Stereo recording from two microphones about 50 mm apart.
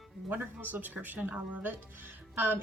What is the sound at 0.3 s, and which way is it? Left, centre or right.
A woman's voice, right.